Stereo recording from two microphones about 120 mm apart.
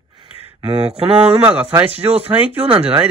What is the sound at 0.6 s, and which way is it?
Speech, 35° right (ahead or behind).